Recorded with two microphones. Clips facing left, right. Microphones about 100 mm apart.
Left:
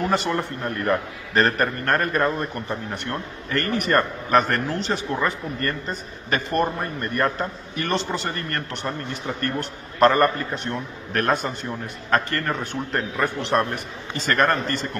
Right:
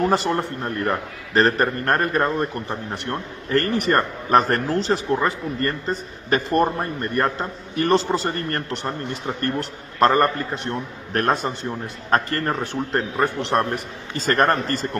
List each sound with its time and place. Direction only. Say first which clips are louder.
0.0 s a man's voice: right 3 dB; 35° right (ahead or behind)